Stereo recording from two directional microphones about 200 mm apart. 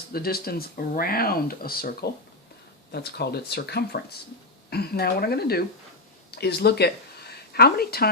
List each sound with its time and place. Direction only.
0.1 s speech: 50° left (ahead or behind)